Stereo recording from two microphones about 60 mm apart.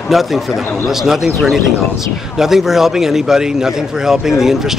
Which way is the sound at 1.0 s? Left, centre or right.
Centre.